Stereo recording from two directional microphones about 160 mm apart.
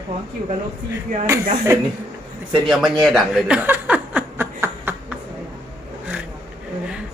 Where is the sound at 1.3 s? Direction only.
15° right (ahead or behind).